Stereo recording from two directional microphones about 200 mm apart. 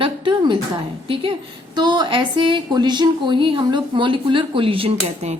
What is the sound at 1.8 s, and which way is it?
A woman's voice, 20° right (ahead or behind).